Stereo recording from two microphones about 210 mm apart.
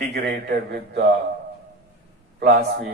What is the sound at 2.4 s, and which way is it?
Speech, 45° right (ahead or behind).